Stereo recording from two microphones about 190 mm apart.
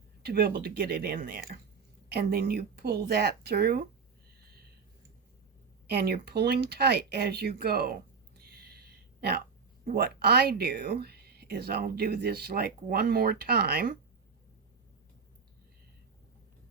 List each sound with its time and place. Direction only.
0.2 s speech: 55° right (ahead or behind)
5.9 s speech: 55° right (ahead or behind)
8.4 s a sound: 55° right (ahead or behind)
9.8 s speech: 55° right (ahead or behind)